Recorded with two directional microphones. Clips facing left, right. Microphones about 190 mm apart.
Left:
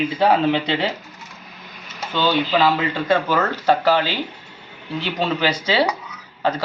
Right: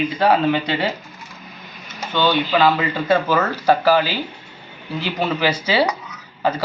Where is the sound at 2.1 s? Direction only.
5° left (ahead or behind).